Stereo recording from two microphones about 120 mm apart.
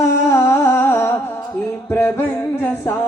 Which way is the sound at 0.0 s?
25° left (ahead or behind).